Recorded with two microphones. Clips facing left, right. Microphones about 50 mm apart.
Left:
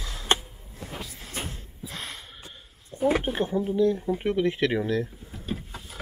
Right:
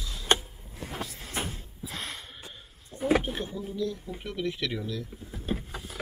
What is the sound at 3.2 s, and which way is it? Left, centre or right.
Speech, left.